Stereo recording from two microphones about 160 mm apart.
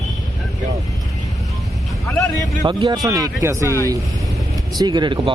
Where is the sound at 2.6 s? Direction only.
30° right (ahead or behind).